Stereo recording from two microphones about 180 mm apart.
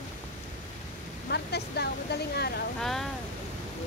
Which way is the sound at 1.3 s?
65° left (ahead or behind).